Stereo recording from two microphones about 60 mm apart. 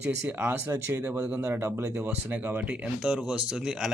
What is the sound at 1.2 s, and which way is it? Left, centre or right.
Speech, centre.